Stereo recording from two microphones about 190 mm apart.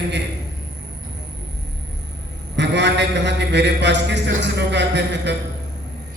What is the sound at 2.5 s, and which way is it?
A man's voice, 65° right (ahead or behind).